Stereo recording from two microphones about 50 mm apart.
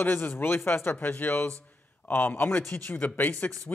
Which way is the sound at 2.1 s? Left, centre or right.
Left.